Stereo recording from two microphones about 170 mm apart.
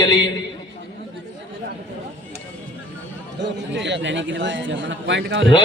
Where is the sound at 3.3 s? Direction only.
90° right.